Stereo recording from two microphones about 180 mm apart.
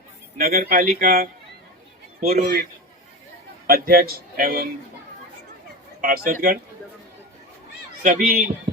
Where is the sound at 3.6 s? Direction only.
55° right (ahead or behind).